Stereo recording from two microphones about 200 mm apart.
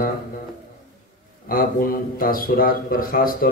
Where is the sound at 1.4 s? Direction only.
45° left (ahead or behind).